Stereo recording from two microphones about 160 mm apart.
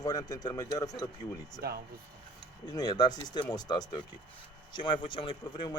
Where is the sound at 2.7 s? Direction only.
25° left (ahead or behind).